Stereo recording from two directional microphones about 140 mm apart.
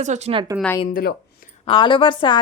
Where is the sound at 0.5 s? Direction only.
10° right (ahead or behind).